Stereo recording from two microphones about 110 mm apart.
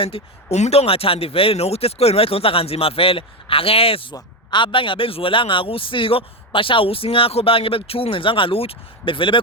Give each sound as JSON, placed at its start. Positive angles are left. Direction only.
{"t": 0.1, "sound": "speech", "side_deg": 55}
{"t": 0.5, "sound": "speech", "side_deg": 80}
{"t": 4.1, "sound": "speech", "side_deg": 45}